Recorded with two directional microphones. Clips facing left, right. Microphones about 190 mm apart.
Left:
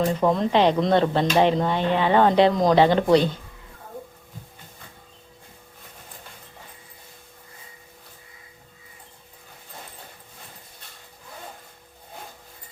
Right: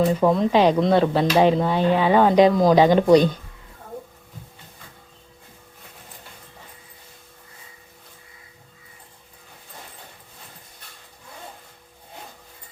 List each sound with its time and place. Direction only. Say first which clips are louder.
0.1 s speech: right 2 dB; 5° right (ahead or behind)